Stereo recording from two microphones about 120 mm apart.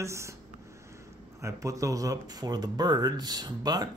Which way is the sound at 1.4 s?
25° right (ahead or behind).